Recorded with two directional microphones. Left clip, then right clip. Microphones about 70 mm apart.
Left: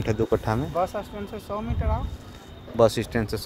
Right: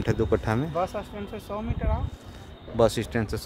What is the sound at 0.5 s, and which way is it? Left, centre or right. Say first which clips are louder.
Speech: left 1 dB; right.